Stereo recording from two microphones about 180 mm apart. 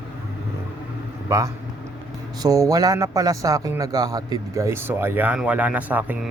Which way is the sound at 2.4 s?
20° right (ahead or behind).